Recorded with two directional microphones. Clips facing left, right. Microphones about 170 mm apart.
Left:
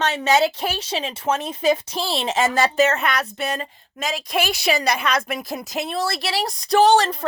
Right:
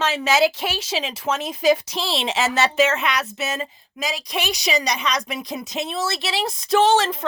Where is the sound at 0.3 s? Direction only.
30° left (ahead or behind).